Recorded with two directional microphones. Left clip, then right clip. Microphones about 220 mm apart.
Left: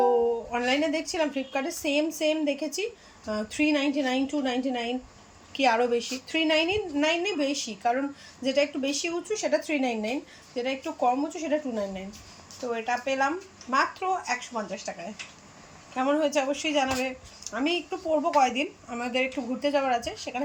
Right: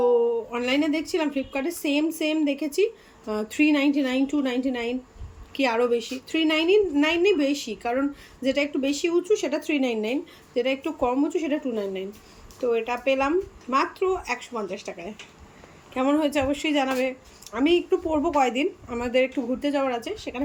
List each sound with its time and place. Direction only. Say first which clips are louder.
0.5 s a woman's voice: right 1 dB; 5° right (ahead or behind)